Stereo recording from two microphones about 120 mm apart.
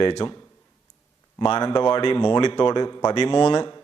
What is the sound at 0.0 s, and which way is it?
Speech, 45° left (ahead or behind).